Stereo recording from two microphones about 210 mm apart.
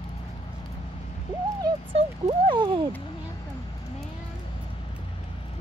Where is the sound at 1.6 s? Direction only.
25° right (ahead or behind).